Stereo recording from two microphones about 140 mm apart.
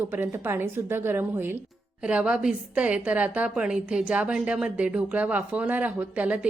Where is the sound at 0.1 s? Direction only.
15° right (ahead or behind).